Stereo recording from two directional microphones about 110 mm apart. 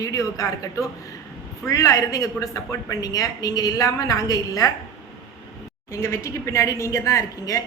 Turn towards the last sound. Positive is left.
turn(degrees=30)  # may be behind; listen again after turning